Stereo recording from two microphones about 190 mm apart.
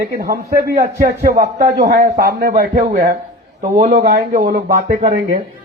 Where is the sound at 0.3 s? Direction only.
55° right (ahead or behind).